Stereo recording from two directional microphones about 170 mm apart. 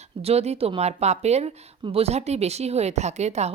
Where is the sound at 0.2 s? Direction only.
35° right (ahead or behind).